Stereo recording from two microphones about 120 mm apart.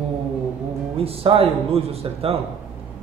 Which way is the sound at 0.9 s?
55° right (ahead or behind).